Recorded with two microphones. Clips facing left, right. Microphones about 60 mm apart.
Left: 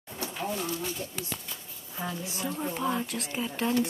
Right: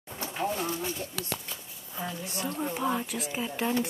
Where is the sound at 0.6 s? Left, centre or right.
Right.